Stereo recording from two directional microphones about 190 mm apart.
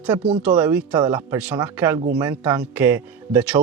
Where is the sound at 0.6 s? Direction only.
10° right (ahead or behind).